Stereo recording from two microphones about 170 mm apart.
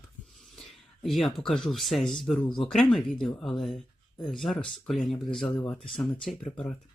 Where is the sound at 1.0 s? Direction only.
Centre (ahead or behind).